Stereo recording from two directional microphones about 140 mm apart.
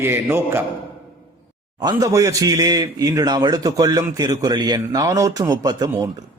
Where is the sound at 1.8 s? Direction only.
25° right (ahead or behind).